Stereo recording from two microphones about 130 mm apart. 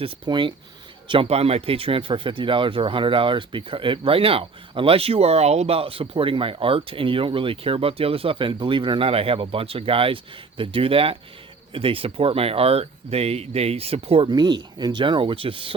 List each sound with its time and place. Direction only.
0.0 s speech: 40° right (ahead or behind)
14.3 s speech: 35° right (ahead or behind)